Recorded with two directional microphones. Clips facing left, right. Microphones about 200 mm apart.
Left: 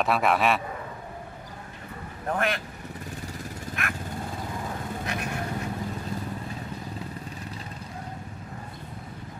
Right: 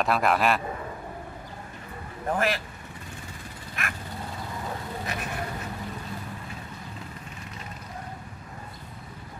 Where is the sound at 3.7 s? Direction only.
50° left (ahead or behind).